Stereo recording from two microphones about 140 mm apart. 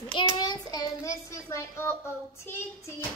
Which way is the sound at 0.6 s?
25° left (ahead or behind).